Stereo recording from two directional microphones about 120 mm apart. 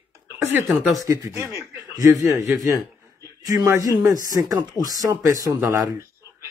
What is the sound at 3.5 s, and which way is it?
Speech, 25° right (ahead or behind).